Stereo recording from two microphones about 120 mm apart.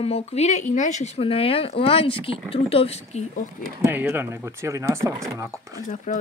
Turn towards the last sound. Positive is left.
turn(degrees=90)